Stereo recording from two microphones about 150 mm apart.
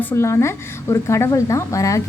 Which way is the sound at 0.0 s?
15° left (ahead or behind).